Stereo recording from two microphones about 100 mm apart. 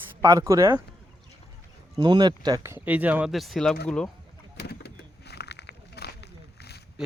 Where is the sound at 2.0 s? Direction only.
45° right (ahead or behind).